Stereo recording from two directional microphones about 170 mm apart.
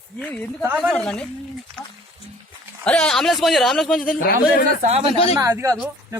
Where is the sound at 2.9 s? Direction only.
5° left (ahead or behind).